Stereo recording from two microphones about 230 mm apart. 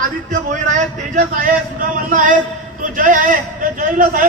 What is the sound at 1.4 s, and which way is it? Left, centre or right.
Speech, right.